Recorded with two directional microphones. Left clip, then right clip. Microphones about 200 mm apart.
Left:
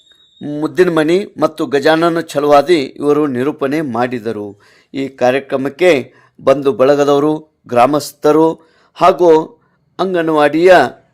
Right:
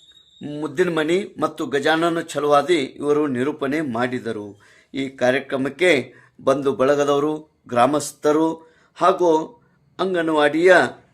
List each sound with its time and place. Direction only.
0.4 s speech: 35° left (ahead or behind)